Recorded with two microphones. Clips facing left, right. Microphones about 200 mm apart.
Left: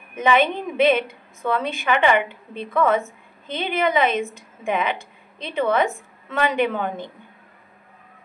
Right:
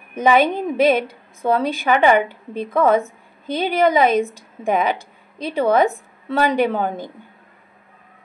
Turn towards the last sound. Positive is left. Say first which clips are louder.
# right 3 dB
turn(degrees=-35)  # may be behind; listen again after turning